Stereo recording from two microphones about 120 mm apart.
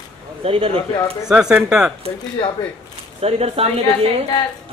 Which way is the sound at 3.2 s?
55° right (ahead or behind).